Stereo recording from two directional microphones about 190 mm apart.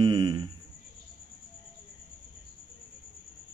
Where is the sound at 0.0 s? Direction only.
25° right (ahead or behind).